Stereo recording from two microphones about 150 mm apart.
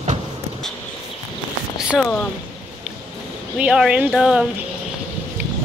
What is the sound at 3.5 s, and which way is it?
Speech, 5° right (ahead or behind).